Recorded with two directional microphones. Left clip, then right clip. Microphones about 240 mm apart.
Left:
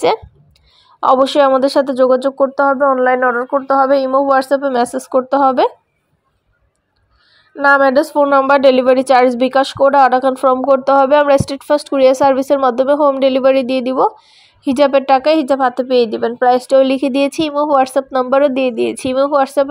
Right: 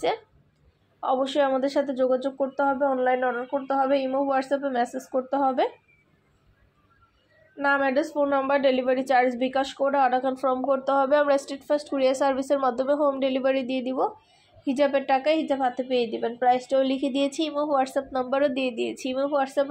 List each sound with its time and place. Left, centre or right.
1.0 s a woman's voice: left
7.5 s a woman's voice: left